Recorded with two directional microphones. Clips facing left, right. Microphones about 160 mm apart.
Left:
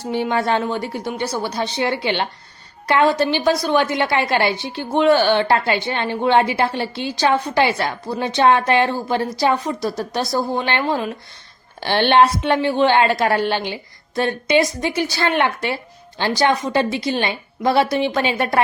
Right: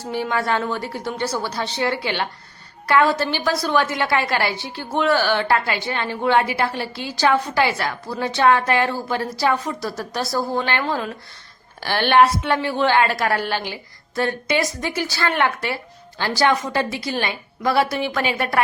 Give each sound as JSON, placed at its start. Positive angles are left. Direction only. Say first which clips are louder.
{"t": 0.1, "sound": "a woman's voice", "louder": "left 3 dB", "side_deg": 20}